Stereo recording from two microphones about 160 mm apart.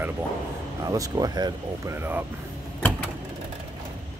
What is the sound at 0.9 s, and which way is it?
Speech, 25° right (ahead or behind).